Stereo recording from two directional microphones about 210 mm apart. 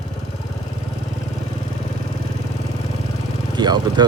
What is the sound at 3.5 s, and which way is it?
Speech, 20° right (ahead or behind).